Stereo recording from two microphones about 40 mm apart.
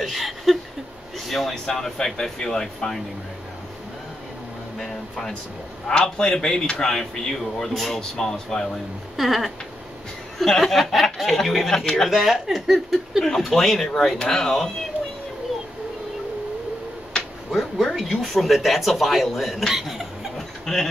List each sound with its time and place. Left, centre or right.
0.0 s a sound: centre
1.5 s speech: centre
4.7 s speech: centre
6.0 s speech: centre
8.0 s speech: centre
9.1 s speech: centre
12.1 s speech: centre
13.2 s speech: centre
17.5 s speech: centre
20.3 s a sound: centre